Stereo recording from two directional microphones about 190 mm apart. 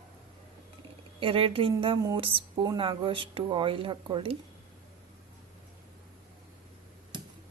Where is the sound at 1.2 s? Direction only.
30° right (ahead or behind).